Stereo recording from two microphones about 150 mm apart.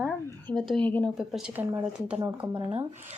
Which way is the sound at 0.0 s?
5° left (ahead or behind).